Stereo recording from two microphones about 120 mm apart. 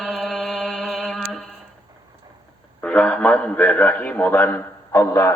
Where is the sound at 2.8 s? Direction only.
10° left (ahead or behind).